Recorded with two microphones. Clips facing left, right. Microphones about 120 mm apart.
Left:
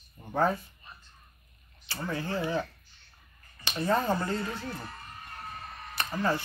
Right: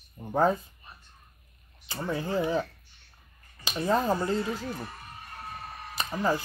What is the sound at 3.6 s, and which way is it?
Speech, 10° right (ahead or behind).